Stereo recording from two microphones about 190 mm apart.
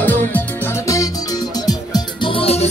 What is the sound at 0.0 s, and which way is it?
Music, 10° left (ahead or behind).